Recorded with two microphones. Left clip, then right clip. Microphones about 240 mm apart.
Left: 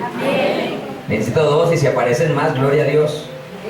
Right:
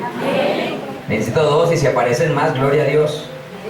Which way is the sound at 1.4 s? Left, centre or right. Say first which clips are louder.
Even; left.